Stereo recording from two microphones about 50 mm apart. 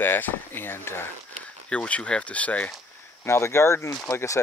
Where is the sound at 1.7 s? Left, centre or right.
Left.